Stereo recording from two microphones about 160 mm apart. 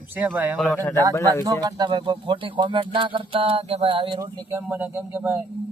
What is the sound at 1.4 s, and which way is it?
Speech, 25° right (ahead or behind).